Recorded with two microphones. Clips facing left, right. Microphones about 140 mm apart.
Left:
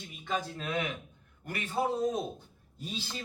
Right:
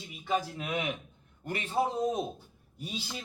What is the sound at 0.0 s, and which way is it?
A man's voice, 10° right (ahead or behind).